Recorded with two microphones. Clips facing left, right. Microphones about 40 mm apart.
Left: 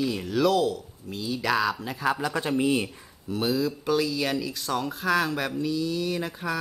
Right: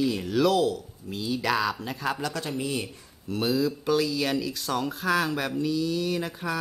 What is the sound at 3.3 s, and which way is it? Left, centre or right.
Speech, centre.